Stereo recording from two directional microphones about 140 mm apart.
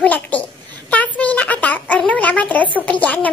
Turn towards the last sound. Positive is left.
turn(degrees=10)  # may be behind; listen again after turning